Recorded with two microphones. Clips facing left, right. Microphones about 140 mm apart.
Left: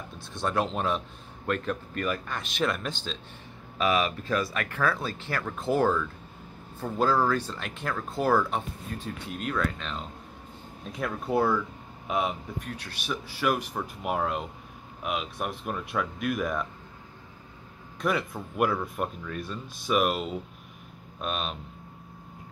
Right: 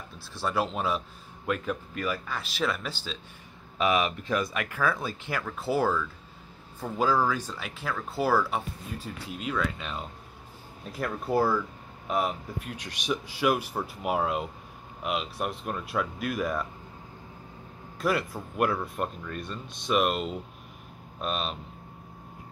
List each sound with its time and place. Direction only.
0.3 s speech: 5° right (ahead or behind)
3.7 s speech: 20° right (ahead or behind); by 12.4 s centre (ahead or behind)
12.6 s speech: 15° right (ahead or behind)
17.9 s speech: centre (ahead or behind)